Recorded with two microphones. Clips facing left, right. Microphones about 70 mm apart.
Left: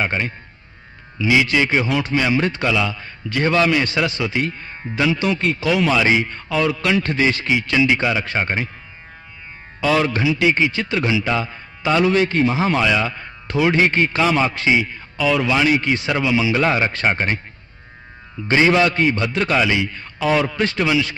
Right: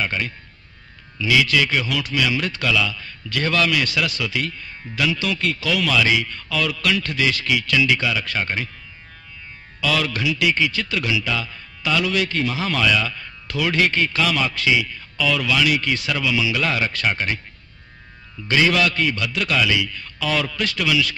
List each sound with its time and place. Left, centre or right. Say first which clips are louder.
0.0 s a man's voice: left 3 dB; left
9.8 s a man's voice: left 5 dB; left
18.5 s a man's voice: left 3 dB; left